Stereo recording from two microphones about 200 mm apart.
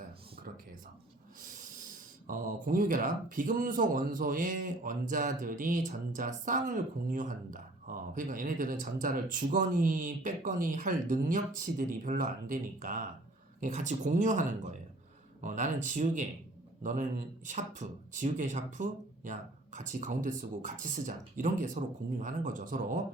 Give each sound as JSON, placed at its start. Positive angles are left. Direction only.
{"t": 2.2, "sound": "speech", "side_deg": -40}